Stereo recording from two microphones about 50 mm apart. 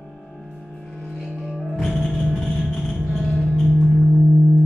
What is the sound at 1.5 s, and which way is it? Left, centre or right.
Music, centre.